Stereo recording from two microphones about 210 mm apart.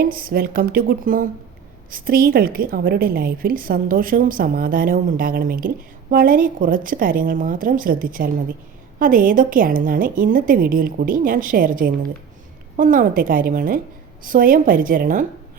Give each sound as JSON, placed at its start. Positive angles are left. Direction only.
{"t": 0.0, "sound": "a woman's voice", "side_deg": -45}